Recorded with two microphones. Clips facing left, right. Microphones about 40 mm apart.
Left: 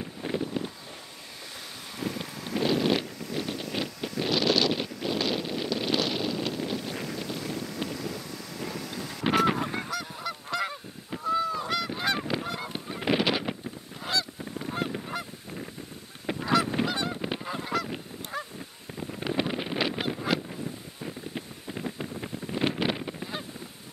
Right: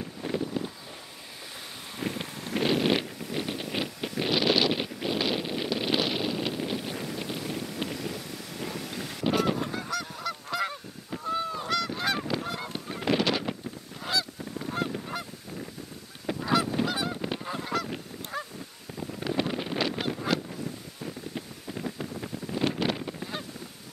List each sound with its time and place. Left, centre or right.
0.0 s a sound: centre
2.0 s wind: centre
2.5 s a sound: centre
7.2 s vehicle: centre
9.2 s goose: left
9.8 s goose: centre
10.5 s goose: centre
11.2 s goose: centre
11.7 s goose: centre
13.0 s honk: centre
14.0 s goose: centre
16.8 s goose: centre
18.9 s wind noise: centre
21.0 s a sound: centre